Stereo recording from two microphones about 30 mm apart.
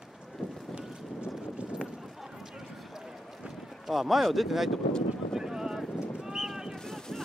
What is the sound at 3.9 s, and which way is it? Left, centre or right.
Speech, centre.